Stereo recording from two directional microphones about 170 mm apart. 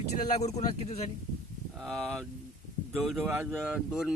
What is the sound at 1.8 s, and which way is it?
Speech, centre (ahead or behind).